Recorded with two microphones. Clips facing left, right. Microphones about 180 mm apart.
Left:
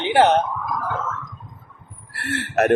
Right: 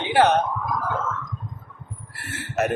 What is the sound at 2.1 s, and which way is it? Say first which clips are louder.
Speech: left 5 dB; 70° left (ahead or behind).